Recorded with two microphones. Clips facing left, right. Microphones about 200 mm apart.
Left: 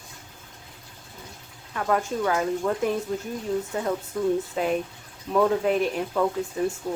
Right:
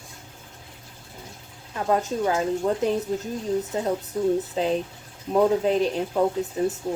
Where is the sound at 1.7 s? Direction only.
25° right (ahead or behind).